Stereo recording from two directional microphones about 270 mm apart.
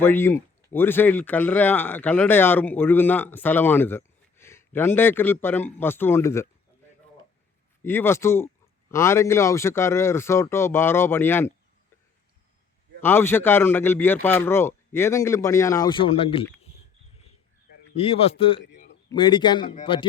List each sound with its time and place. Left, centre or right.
0.0 s speech: centre
7.8 s speech: centre
13.0 s speech: centre
17.9 s speech: left